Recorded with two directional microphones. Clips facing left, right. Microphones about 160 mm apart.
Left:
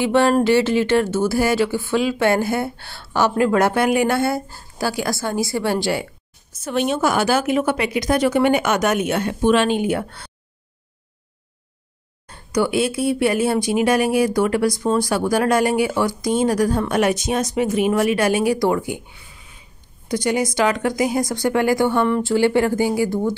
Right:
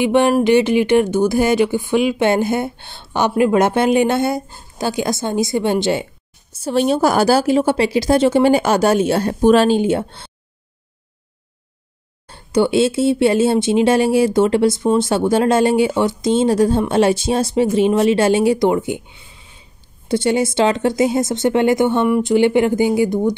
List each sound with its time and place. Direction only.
0.0 s speech: 15° right (ahead or behind)
6.5 s a woman's voice: 35° right (ahead or behind)
12.3 s speech: 25° right (ahead or behind)